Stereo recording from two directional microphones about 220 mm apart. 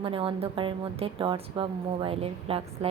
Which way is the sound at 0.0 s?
25° right (ahead or behind).